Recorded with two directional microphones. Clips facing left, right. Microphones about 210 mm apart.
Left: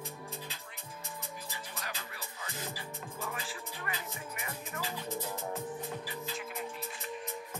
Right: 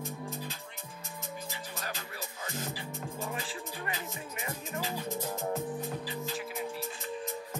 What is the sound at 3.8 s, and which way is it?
Music, 25° right (ahead or behind).